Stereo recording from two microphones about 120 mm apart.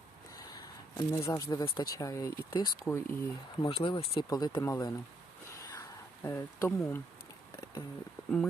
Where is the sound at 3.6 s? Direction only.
45° left (ahead or behind).